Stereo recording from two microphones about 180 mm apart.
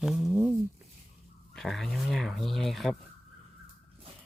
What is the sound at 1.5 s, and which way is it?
Speech, centre (ahead or behind).